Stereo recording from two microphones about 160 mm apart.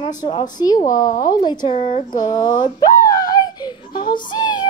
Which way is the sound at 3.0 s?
20° left (ahead or behind).